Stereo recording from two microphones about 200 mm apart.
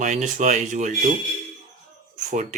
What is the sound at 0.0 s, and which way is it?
Speech, 35° right (ahead or behind).